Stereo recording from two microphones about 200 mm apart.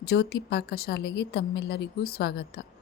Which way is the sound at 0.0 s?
55° left (ahead or behind).